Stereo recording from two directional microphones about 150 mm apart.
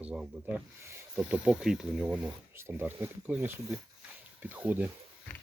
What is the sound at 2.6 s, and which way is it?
Speech, 15° right (ahead or behind).